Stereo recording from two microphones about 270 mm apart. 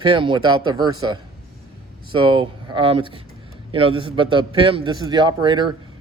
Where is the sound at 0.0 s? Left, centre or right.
Centre.